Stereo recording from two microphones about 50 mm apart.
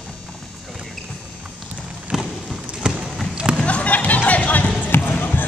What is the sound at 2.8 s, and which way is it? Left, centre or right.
Clip-clop, centre.